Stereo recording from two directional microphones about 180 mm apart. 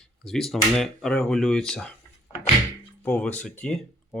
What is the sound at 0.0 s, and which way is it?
Speech, 5° left (ahead or behind).